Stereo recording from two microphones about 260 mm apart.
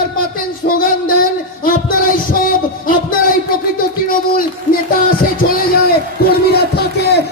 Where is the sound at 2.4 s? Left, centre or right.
Left.